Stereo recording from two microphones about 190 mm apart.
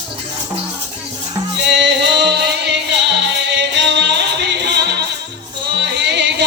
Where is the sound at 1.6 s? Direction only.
65° right (ahead or behind).